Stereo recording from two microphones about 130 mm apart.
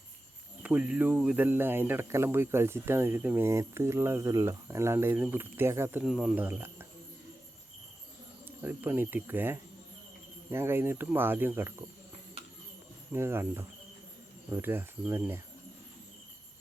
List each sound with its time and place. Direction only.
0.6 s speech: 10° right (ahead or behind)
6.1 s speech: 5° right (ahead or behind)
8.4 s speech: 15° right (ahead or behind)
13.1 s speech: 20° right (ahead or behind)